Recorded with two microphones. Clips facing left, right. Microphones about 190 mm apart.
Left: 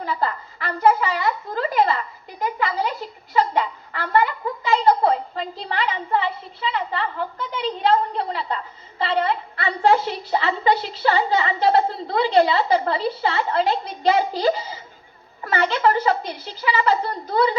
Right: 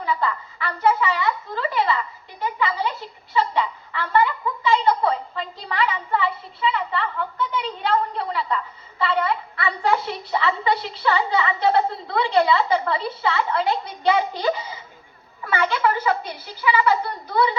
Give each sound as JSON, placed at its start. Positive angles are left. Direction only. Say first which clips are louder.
{"t": 0.0, "sound": "a woman's voice", "louder": "even", "side_deg": 40}
{"t": 2.6, "sound": "a sound", "louder": "right 1 dB", "side_deg": 40}
{"t": 15.5, "sound": "a woman's voice", "louder": "left 2 dB", "side_deg": 35}